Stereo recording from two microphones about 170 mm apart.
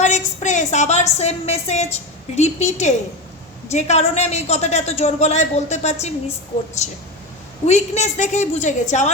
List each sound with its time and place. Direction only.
0.0 s a man's voice: 45° left (ahead or behind)